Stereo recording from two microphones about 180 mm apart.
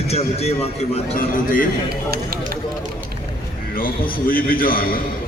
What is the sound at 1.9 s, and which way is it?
Speech, 60° right (ahead or behind).